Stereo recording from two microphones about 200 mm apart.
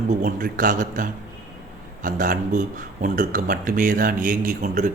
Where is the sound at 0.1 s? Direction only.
40° right (ahead or behind).